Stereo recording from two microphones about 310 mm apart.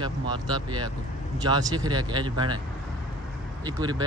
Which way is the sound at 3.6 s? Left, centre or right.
Centre.